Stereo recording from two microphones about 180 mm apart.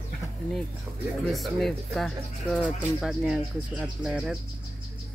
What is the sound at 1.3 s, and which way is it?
Speech, centre (ahead or behind).